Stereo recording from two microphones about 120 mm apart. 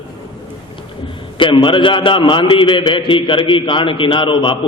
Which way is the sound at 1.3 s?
45° left (ahead or behind).